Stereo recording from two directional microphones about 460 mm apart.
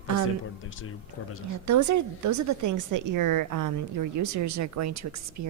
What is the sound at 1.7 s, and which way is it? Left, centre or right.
A woman's voice, right.